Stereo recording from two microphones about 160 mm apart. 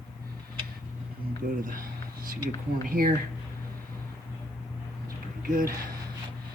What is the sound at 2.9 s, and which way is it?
Speech, 60° right (ahead or behind).